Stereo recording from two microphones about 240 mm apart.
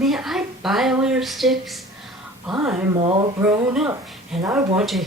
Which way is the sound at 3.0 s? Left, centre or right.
Right.